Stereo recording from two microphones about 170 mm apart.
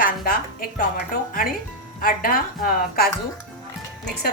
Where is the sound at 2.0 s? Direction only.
55° left (ahead or behind).